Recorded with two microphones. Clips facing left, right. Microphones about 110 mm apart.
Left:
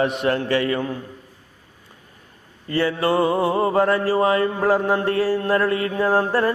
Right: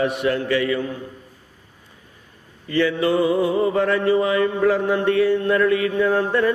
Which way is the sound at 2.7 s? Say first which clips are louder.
Right 1 dB; 35° left (ahead or behind).